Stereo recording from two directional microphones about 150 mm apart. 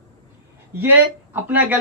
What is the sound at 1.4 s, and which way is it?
Speech, 10° right (ahead or behind).